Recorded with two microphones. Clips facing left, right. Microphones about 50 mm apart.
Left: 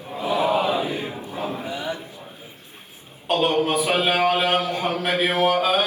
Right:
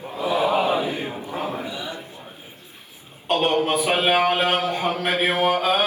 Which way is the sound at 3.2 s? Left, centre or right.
Right.